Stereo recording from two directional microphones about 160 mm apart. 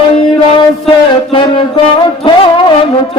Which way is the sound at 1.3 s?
30° left (ahead or behind).